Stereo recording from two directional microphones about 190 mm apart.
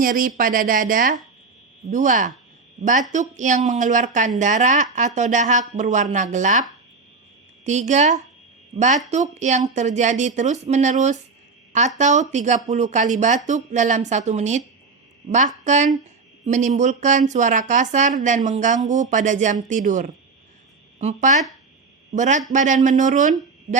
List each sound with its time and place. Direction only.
0.0 s speech: 45° right (ahead or behind)
7.6 s speech: 35° right (ahead or behind)